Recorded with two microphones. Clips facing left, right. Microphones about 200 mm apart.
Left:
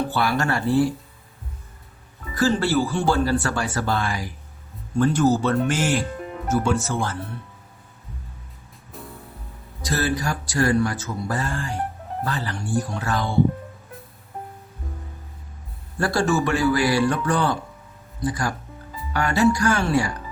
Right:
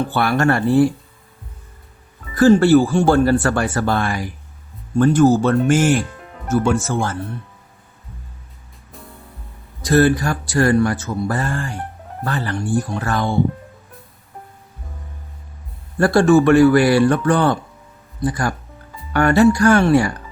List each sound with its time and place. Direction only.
0.1 s speech: 55° right (ahead or behind)
2.4 s speech: 50° right (ahead or behind)
9.8 s speech: 55° right (ahead or behind)
16.0 s speech: 55° right (ahead or behind)